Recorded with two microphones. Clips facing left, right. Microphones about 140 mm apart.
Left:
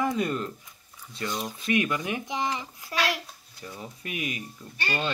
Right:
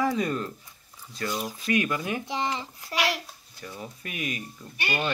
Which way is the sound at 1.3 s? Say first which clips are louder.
Right 1 dB; 5° right (ahead or behind).